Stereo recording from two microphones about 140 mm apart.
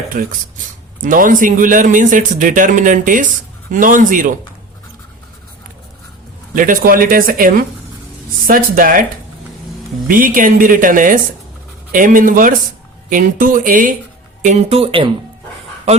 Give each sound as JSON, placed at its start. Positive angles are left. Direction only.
{"t": 1.0, "sound": "speech", "side_deg": -70}
{"t": 6.5, "sound": "speech", "side_deg": -75}
{"t": 10.1, "sound": "speech", "side_deg": -80}
{"t": 14.4, "sound": "speech", "side_deg": -50}